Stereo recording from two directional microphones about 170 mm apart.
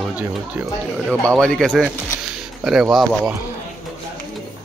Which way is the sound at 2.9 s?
Centre (ahead or behind).